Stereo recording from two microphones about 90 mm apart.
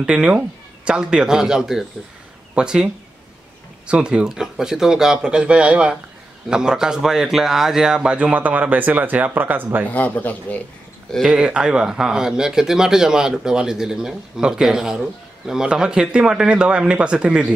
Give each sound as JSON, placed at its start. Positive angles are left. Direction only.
{"t": 0.0, "sound": "speech", "side_deg": -10}
{"t": 9.8, "sound": "speech", "side_deg": 15}
{"t": 11.2, "sound": "speech", "side_deg": -10}